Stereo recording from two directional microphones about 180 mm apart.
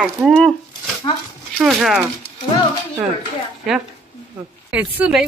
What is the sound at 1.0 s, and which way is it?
Speech, 25° left (ahead or behind).